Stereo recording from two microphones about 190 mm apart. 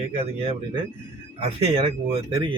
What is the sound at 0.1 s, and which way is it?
A man's voice, 30° right (ahead or behind).